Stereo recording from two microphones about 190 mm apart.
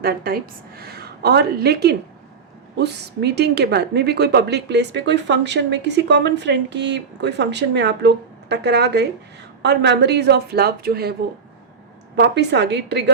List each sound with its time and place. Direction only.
0.0 s a woman's voice: 55° right (ahead or behind)
12.1 s a woman's voice: 60° right (ahead or behind)